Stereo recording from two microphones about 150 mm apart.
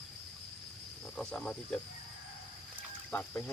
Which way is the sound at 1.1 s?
5° left (ahead or behind).